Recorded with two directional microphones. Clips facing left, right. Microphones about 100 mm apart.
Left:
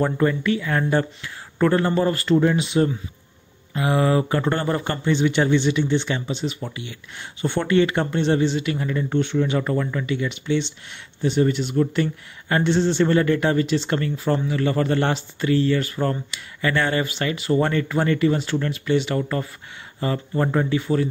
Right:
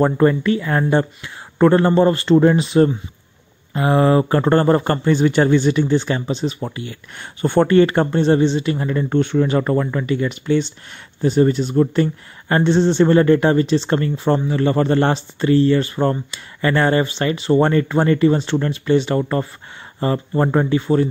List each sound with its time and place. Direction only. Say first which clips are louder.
0.0 s a man's voice: right 5 dB; 40° right (ahead or behind)